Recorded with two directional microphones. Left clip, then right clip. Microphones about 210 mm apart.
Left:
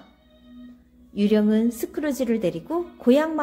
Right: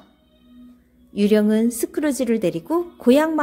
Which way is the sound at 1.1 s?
30° right (ahead or behind).